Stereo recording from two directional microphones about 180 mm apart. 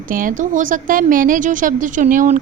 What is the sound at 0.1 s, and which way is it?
A woman's voice, 50° right (ahead or behind).